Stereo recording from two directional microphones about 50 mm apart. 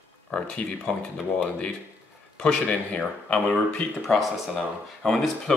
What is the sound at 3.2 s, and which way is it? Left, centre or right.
Speech, left.